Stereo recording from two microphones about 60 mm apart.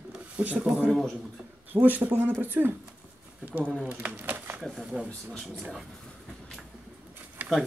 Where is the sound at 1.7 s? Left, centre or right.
Right.